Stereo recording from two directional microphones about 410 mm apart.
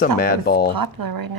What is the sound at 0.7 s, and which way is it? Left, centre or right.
Speech, right.